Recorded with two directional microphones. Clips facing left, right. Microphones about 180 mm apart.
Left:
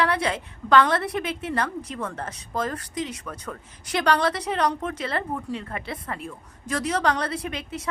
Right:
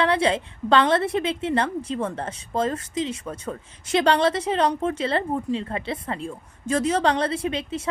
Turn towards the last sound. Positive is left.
turn(degrees=-25)  # may be behind; listen again after turning